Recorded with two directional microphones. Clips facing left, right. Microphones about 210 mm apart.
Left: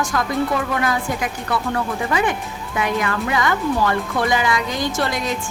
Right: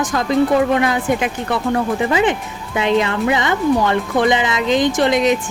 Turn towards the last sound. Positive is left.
turn(degrees=-20)  # may be behind; listen again after turning